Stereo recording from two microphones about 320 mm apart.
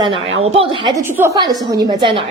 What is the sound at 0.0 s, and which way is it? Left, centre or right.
A woman's voice, centre.